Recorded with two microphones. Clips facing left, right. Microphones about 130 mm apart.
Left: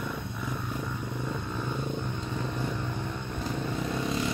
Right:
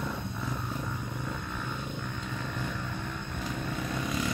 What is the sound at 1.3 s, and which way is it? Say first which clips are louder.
Vehicle: left 4 dB; 15° left (ahead or behind).